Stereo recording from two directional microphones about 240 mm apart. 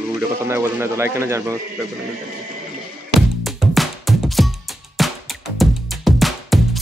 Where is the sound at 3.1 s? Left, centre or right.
Centre.